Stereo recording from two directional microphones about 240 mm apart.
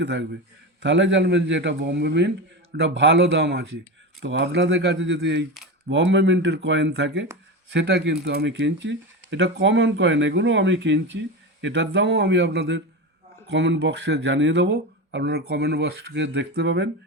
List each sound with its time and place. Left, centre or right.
0.0 s speech: right